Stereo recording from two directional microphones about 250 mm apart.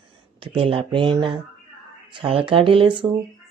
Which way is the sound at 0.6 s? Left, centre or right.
Right.